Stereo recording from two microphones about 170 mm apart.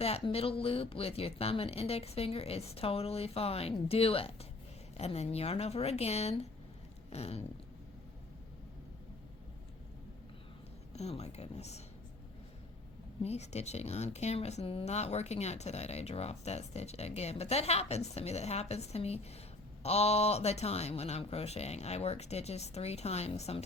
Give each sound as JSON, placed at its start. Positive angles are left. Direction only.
{"t": 0.0, "sound": "speech", "side_deg": 35}
{"t": 10.9, "sound": "speech", "side_deg": 40}
{"t": 13.2, "sound": "speech", "side_deg": 40}